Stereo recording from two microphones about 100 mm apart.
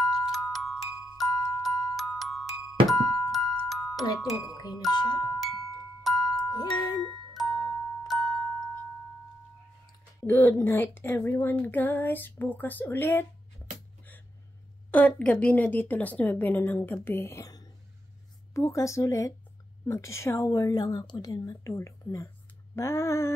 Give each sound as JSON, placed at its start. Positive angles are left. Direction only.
{"t": 0.0, "sound": "glockenspiel", "side_deg": 0}
{"t": 3.6, "sound": "music", "side_deg": 0}
{"t": 4.0, "sound": "speech", "side_deg": 40}
{"t": 6.0, "sound": "music", "side_deg": 5}
{"t": 6.5, "sound": "music", "side_deg": 40}
{"t": 7.3, "sound": "glockenspiel", "side_deg": 0}
{"t": 10.2, "sound": "speech", "side_deg": 20}
{"t": 14.9, "sound": "a woman's voice", "side_deg": 15}